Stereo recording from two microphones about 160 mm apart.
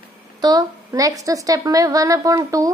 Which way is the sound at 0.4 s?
25° right (ahead or behind).